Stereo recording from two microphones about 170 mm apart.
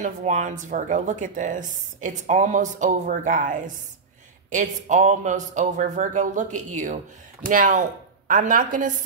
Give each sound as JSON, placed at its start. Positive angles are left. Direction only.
{"t": 0.0, "sound": "a woman's voice", "side_deg": -45}